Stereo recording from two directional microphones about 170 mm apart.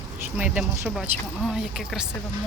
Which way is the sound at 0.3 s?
5° right (ahead or behind).